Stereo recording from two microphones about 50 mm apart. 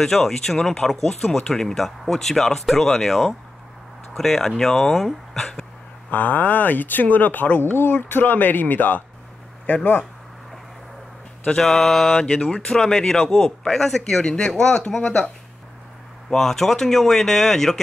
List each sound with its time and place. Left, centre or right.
0.0 s speech: centre
6.0 s speech: left
7.7 s speech: left
11.6 s mantra: centre
12.2 s speech: centre
14.2 s speech: centre
16.3 s speech: centre